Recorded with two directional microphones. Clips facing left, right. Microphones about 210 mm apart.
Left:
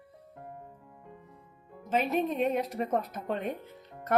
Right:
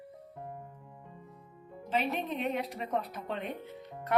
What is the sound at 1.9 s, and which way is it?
A woman's voice, 45° left (ahead or behind).